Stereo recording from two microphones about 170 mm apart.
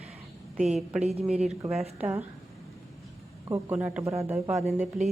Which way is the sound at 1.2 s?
5° right (ahead or behind).